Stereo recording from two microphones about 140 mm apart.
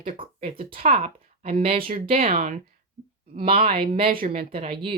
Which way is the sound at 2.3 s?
60° right (ahead or behind).